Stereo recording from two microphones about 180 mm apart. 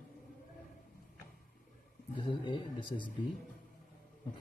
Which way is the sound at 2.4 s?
25° left (ahead or behind).